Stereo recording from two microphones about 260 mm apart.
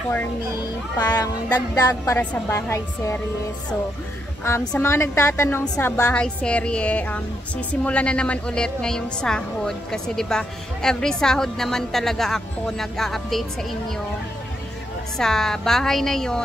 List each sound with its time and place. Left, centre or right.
0.9 s a woman's voice: centre
4.5 s a woman's voice: centre
15.1 s a woman's voice: centre